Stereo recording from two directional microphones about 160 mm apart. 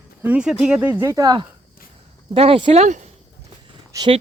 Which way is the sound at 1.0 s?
20° right (ahead or behind).